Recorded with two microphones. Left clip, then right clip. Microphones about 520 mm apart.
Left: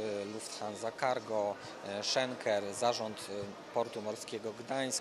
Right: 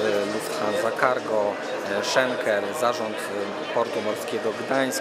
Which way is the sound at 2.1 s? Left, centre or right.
Left.